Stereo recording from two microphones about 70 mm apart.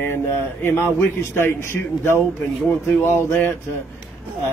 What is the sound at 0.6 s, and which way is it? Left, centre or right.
Speech, left.